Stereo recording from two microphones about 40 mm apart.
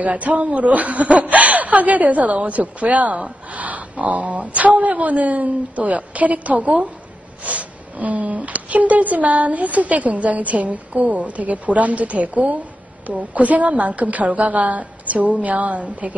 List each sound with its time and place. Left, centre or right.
0.0 s a woman's voice: right